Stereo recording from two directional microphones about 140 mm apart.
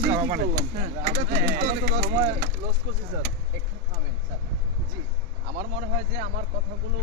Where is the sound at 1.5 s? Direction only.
90° right.